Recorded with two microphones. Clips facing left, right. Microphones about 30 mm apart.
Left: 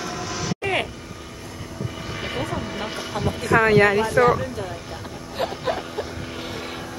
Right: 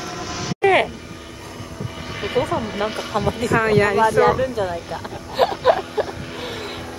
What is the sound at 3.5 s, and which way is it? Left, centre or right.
Speech, centre.